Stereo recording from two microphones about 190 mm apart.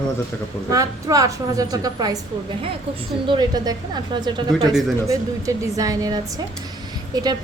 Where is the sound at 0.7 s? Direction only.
20° right (ahead or behind).